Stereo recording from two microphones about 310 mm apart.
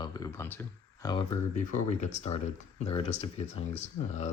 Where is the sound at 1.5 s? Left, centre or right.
Left.